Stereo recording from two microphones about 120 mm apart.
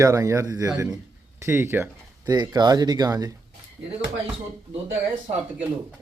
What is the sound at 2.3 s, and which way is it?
Speech, 35° right (ahead or behind).